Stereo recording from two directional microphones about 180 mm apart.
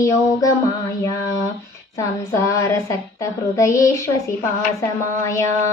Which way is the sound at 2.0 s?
15° left (ahead or behind).